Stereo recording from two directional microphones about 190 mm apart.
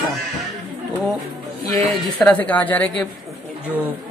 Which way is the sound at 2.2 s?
10° left (ahead or behind).